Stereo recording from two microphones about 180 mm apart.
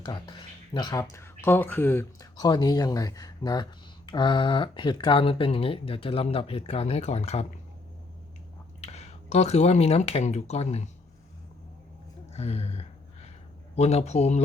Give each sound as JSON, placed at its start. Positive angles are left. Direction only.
{"t": 0.0, "sound": "speech", "side_deg": 25}
{"t": 8.8, "sound": "speech", "side_deg": 35}
{"t": 12.3, "sound": "speech", "side_deg": 35}